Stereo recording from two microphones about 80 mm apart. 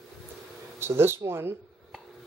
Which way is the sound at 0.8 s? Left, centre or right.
Right.